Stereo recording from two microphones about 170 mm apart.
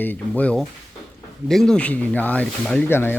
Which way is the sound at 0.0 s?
10° left (ahead or behind).